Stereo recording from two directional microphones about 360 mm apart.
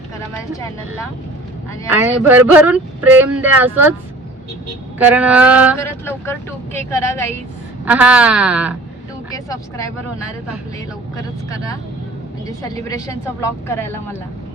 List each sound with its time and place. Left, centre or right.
1.9 s speech: centre
4.9 s speech: centre
5.8 s speech: centre
7.9 s speech: centre
9.3 s speech: centre
11.5 s speech: centre